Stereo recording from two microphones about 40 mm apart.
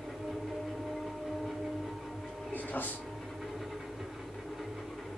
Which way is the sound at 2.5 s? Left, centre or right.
Left.